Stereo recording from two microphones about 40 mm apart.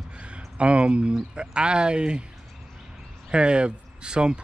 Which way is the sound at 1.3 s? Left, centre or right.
Right.